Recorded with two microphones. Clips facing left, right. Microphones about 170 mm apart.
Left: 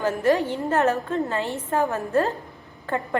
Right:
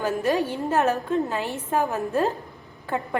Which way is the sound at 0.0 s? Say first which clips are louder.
Left 2 dB; 15° right (ahead or behind).